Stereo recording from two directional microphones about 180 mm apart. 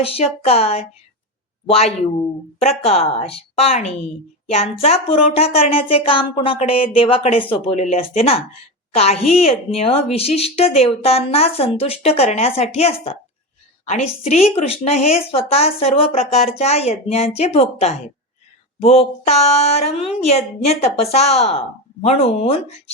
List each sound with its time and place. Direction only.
0.0 s a woman's voice: 35° left (ahead or behind)